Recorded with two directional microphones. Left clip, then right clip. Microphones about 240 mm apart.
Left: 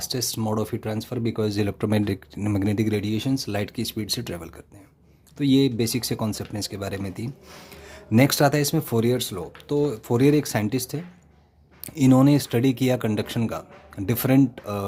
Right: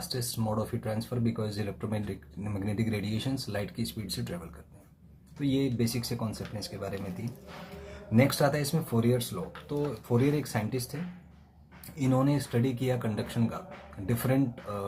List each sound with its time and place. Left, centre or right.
0.1 s speech: left
5.4 s speech: left
8.1 s speech: left
11.9 s speech: left